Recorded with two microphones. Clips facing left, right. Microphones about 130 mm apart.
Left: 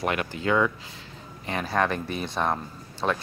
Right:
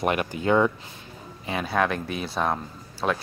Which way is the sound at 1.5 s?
5° right (ahead or behind).